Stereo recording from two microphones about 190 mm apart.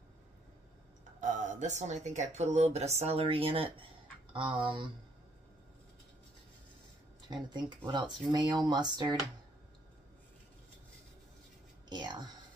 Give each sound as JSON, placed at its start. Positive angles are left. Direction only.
{"t": 1.2, "sound": "speech", "side_deg": -40}
{"t": 7.2, "sound": "speech", "side_deg": -25}
{"t": 11.9, "sound": "speech", "side_deg": -20}